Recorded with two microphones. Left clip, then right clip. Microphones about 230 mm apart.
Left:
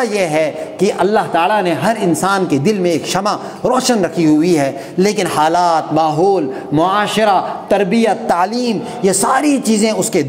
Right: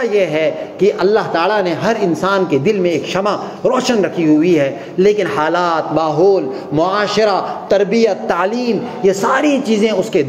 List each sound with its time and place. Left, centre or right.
0.0 s speech: left